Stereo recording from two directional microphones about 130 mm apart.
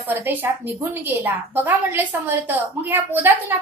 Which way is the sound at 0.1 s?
15° right (ahead or behind).